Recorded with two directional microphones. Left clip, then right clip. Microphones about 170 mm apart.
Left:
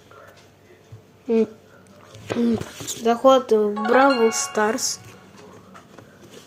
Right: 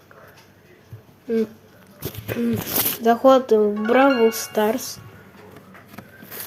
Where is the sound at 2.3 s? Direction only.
15° left (ahead or behind).